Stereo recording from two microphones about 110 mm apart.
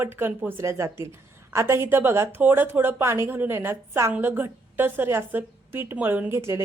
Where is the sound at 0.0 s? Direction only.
20° right (ahead or behind).